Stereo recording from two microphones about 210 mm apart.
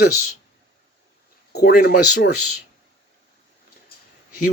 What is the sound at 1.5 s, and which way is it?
Speech, 50° left (ahead or behind).